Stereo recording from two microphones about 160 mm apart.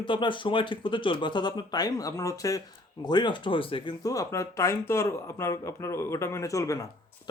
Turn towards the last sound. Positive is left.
turn(degrees=20)  # may be behind; listen again after turning